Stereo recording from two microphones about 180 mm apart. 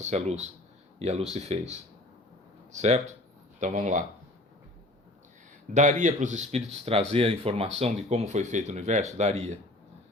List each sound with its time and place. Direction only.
0.0 s a man's voice: 40° right (ahead or behind)
2.7 s a man's voice: 40° right (ahead or behind)
5.7 s a man's voice: 45° right (ahead or behind)